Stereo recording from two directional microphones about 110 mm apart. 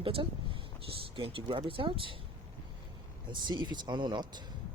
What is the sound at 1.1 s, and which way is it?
Speech, 50° right (ahead or behind).